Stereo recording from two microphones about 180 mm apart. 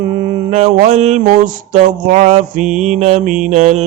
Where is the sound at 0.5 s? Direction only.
40° right (ahead or behind).